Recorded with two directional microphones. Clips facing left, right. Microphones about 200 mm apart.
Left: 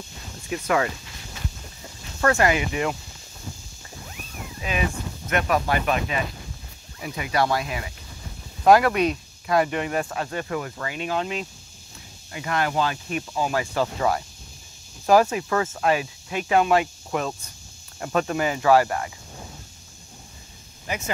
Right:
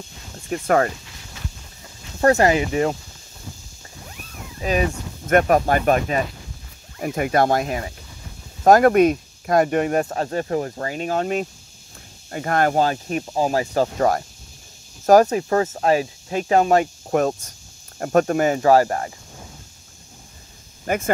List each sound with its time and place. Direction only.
0.5 s speech: 45° right (ahead or behind)
2.1 s speech: 35° right (ahead or behind)
4.6 s speech: 40° right (ahead or behind)
20.8 s speech: 50° right (ahead or behind)